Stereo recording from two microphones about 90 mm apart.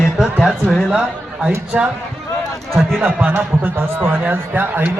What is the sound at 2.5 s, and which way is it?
Run, centre (ahead or behind).